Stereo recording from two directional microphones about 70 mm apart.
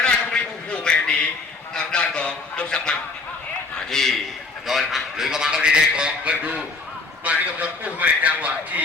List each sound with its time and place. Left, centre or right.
0.0 s a sound: centre
1.7 s honk: centre
3.8 s a man's voice: centre; by 8.8 s right